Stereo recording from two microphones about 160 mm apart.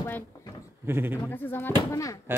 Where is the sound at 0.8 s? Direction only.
15° right (ahead or behind).